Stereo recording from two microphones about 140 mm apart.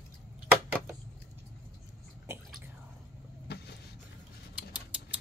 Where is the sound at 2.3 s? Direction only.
20° right (ahead or behind).